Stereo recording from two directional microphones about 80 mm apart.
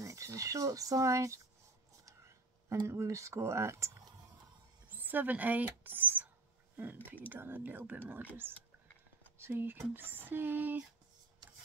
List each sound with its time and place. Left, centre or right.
0.0 s speech: right
2.9 s speech: right
4.8 s a sound: right
7.2 s speech: right